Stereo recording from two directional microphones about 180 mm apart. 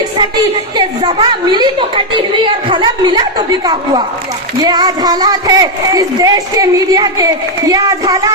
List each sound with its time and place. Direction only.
0.8 s speech: 25° right (ahead or behind)